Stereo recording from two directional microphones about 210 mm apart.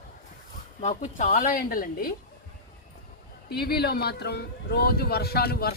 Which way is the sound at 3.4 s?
50° left (ahead or behind).